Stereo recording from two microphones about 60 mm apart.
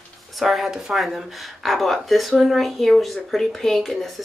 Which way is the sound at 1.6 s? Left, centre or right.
Centre.